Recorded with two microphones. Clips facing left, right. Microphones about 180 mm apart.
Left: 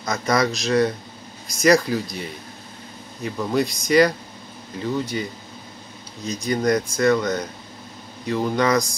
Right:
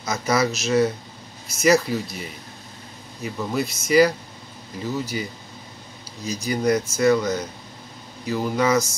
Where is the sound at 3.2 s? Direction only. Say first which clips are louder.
Left 3 dB; 5° right (ahead or behind).